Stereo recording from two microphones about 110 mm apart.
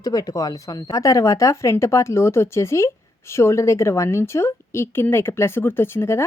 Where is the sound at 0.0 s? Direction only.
35° left (ahead or behind).